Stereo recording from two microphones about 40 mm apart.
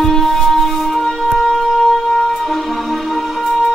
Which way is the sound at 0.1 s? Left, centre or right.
Centre.